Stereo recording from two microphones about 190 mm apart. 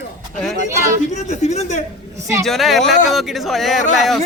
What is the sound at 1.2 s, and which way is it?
Speech, 35° left (ahead or behind).